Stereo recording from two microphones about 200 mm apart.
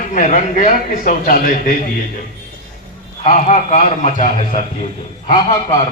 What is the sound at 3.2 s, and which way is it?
A man's voice, 35° left (ahead or behind).